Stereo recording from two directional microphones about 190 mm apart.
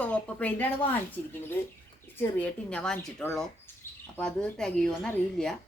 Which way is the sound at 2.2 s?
5° left (ahead or behind).